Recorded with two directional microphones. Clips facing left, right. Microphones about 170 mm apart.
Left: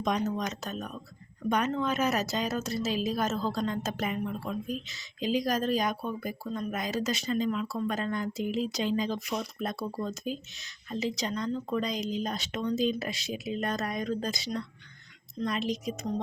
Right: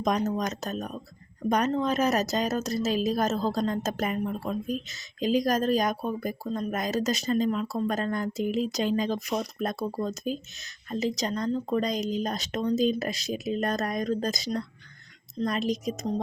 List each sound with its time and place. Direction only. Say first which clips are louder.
0.0 s speech: right 3 dB; 45° right (ahead or behind)